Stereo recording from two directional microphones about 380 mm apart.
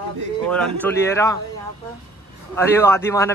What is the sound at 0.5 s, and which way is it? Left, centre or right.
Speech, centre.